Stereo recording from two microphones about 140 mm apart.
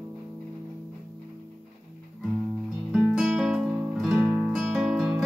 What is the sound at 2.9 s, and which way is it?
Music, 5° right (ahead or behind).